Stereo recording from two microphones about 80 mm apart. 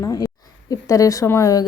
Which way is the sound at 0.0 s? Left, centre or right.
Left.